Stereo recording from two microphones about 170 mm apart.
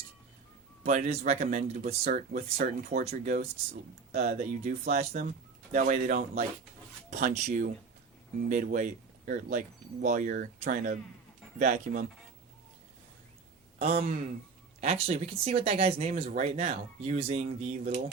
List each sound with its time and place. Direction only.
0.9 s speech: 45° right (ahead or behind)
3.0 s speech: 40° right (ahead or behind)
13.7 s speech: 40° right (ahead or behind)